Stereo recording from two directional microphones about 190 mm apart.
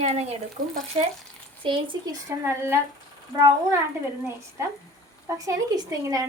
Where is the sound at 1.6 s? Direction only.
25° right (ahead or behind).